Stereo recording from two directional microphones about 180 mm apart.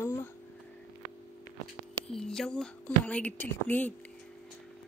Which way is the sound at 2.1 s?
Centre (ahead or behind).